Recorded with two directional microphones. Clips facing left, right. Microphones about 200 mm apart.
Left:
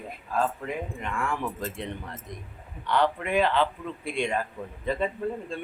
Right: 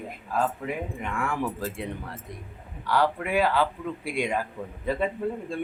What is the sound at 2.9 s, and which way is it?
Speech, 5° right (ahead or behind).